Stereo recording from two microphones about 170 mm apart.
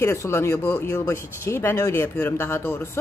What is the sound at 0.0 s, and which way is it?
A woman's voice, 15° left (ahead or behind).